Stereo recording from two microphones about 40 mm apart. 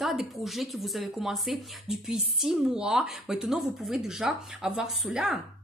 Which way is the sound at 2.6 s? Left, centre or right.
Centre.